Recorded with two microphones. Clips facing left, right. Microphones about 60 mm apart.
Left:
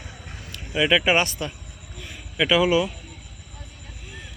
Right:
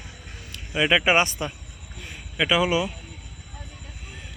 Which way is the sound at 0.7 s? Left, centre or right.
Centre.